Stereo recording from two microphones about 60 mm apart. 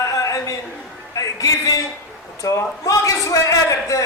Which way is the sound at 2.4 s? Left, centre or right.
Left.